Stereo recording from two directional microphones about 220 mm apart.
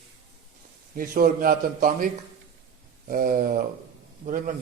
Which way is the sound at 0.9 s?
40° right (ahead or behind).